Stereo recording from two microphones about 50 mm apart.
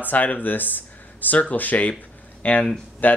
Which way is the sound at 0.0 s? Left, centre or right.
Left.